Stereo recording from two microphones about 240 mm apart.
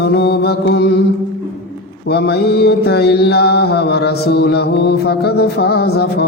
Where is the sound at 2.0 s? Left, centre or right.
Left.